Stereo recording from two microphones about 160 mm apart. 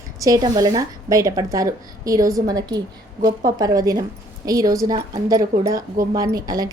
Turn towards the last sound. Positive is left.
turn(degrees=-20)  # may be behind; listen again after turning